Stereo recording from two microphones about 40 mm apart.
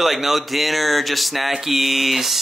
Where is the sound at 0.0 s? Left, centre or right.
Centre.